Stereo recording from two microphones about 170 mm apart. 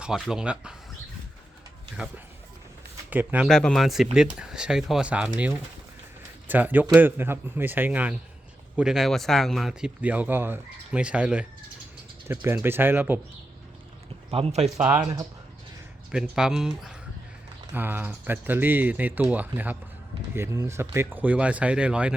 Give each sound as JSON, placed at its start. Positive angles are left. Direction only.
{"t": 0.0, "sound": "speech", "side_deg": -5}
{"t": 3.1, "sound": "speech", "side_deg": -10}
{"t": 3.5, "sound": "speech", "side_deg": 0}
{"t": 6.5, "sound": "speech", "side_deg": -10}
{"t": 14.3, "sound": "speech", "side_deg": -35}
{"t": 14.8, "sound": "speech", "side_deg": -10}
{"t": 16.1, "sound": "speech", "side_deg": -5}